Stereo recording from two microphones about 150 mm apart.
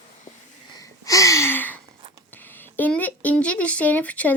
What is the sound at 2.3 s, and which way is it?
Speech, 15° left (ahead or behind).